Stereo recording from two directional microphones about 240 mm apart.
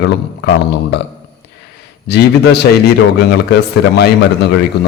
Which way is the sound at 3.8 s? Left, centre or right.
Left.